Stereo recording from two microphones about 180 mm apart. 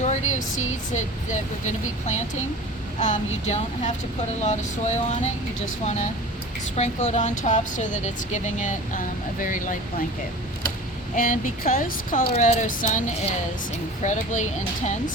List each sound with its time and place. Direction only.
0.0 s a sound: 40° left (ahead or behind)
0.9 s speech: 40° left (ahead or behind)
11.1 s speech: 50° left (ahead or behind)